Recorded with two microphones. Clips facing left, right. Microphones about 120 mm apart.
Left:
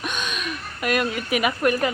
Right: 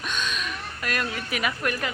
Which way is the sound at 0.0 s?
15° left (ahead or behind).